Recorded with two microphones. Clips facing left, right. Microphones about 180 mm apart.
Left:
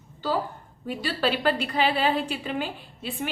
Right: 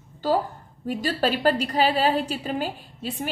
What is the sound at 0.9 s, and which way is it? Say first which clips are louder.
A woman's voice: right 2 dB; 45° right (ahead or behind).